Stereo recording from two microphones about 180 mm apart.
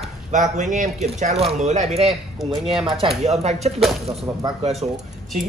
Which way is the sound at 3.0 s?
35° right (ahead or behind).